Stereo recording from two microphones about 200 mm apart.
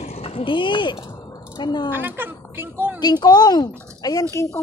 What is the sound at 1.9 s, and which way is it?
Speech, 10° right (ahead or behind).